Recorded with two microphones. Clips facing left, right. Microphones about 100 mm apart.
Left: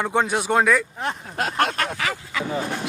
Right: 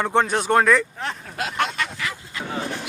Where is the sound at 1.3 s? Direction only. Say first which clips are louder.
Left 2 dB; 45° left (ahead or behind); by 2.3 s 80° left.